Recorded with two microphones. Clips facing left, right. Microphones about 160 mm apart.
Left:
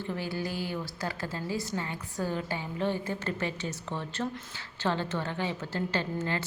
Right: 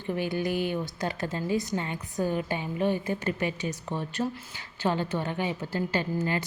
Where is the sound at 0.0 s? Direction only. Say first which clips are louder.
Right 4 dB; 15° right (ahead or behind).